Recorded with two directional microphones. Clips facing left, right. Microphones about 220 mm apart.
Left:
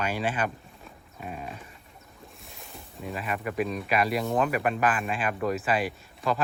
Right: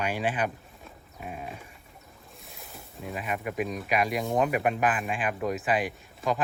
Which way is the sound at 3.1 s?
10° right (ahead or behind).